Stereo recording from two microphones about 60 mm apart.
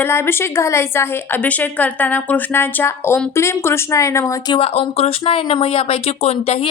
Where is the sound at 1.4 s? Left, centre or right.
Left.